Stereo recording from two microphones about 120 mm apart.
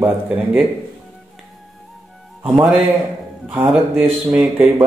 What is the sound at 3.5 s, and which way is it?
Speech, 15° right (ahead or behind).